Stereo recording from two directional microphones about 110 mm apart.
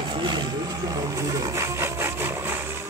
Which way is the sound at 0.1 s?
45° right (ahead or behind).